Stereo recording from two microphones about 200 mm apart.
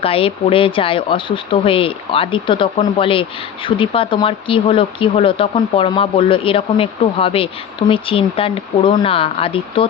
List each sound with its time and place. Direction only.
0.0 s speech: 30° left (ahead or behind)